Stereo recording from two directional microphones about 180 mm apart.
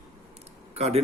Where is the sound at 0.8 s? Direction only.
35° right (ahead or behind).